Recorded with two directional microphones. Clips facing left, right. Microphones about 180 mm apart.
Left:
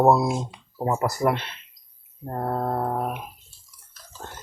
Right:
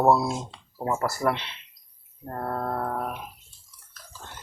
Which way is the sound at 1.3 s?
45° left (ahead or behind).